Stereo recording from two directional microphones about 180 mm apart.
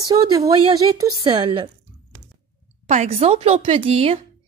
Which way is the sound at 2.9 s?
35° right (ahead or behind).